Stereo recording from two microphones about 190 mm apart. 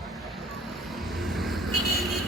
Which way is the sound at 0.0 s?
Centre (ahead or behind).